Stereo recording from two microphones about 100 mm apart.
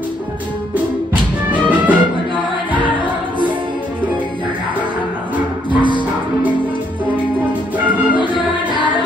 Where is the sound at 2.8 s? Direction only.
55° left (ahead or behind).